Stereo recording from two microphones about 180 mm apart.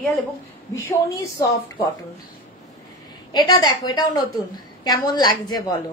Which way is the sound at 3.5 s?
25° left (ahead or behind).